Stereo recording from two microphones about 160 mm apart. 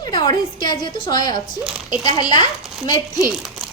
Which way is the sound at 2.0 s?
25° left (ahead or behind).